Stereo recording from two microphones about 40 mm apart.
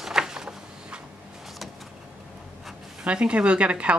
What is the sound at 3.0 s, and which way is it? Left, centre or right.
Speech, right.